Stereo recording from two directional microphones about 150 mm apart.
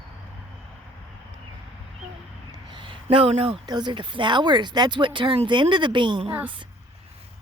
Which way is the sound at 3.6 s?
30° right (ahead or behind).